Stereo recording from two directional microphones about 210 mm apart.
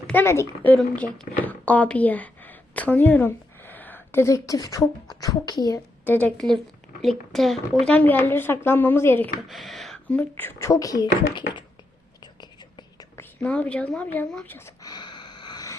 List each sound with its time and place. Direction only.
0.1 s a woman's voice: 10° left (ahead or behind)
12.2 s whispering: 20° left (ahead or behind)
13.4 s speech: 5° left (ahead or behind)